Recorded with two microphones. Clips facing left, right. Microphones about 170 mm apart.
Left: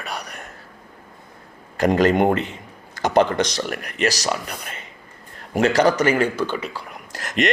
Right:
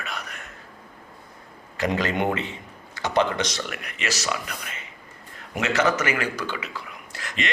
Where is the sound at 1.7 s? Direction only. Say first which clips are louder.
Left 8 dB; 45° left (ahead or behind); by 6.8 s 30° left (ahead or behind).